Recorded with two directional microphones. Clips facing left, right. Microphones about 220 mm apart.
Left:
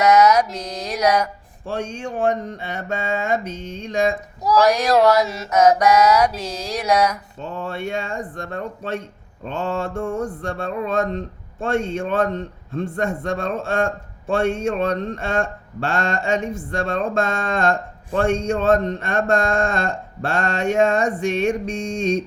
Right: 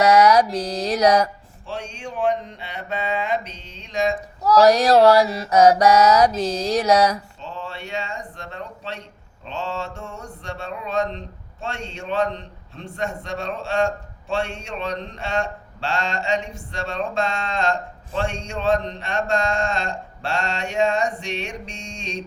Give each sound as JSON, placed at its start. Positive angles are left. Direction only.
{"t": 0.0, "sound": "mantra", "side_deg": -35}
{"t": 1.6, "sound": "speech", "side_deg": 50}
{"t": 4.6, "sound": "mantra", "side_deg": -30}
{"t": 7.3, "sound": "speech", "side_deg": 50}